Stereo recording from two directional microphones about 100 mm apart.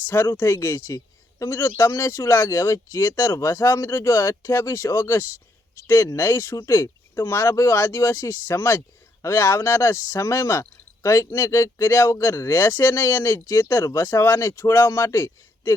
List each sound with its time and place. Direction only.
0.1 s speech: 20° left (ahead or behind)